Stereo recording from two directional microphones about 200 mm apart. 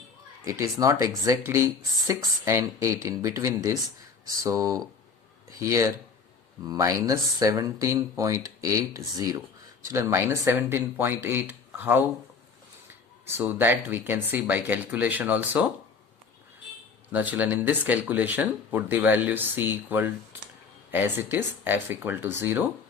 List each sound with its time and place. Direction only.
0.4 s speech: 15° right (ahead or behind)
13.2 s speech: 10° right (ahead or behind)
17.1 s speech: 10° right (ahead or behind)